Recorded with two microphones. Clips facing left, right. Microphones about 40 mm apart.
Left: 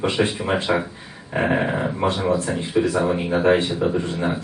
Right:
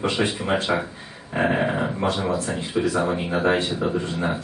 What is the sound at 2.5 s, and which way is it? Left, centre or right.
Speech, centre.